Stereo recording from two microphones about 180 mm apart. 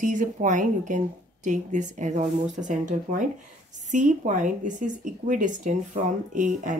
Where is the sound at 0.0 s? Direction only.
45° right (ahead or behind).